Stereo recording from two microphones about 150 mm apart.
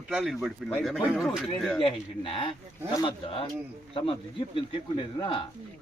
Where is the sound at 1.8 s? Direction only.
35° left (ahead or behind).